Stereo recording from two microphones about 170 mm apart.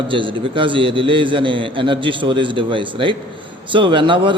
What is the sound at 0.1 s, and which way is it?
A man's voice, 30° right (ahead or behind).